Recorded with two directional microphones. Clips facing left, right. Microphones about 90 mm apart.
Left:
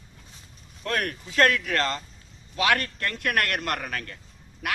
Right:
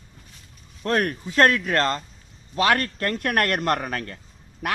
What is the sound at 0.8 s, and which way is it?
Speech, 35° right (ahead or behind).